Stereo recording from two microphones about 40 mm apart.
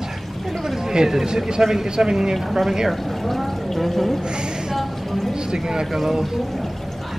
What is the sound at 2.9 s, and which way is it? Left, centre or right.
Speech, centre.